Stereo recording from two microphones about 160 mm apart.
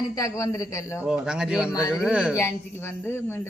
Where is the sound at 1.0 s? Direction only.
5° right (ahead or behind).